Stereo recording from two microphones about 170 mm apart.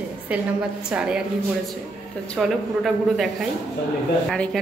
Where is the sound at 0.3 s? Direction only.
5° right (ahead or behind).